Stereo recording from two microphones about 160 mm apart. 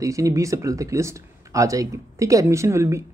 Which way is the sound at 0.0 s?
20° right (ahead or behind).